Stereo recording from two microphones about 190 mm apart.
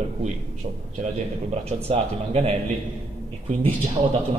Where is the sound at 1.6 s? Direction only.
35° right (ahead or behind).